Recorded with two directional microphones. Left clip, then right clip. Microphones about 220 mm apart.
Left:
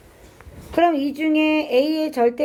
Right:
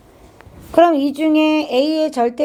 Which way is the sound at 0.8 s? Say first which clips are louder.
Right 6 dB; 35° right (ahead or behind).